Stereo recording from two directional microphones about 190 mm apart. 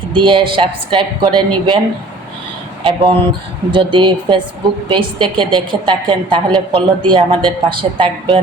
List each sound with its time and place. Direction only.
0.1 s speech: 25° right (ahead or behind)
2.8 s speech: 30° right (ahead or behind)